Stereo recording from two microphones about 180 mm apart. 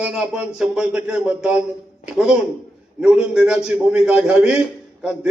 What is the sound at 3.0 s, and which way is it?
A man's voice, 5° right (ahead or behind).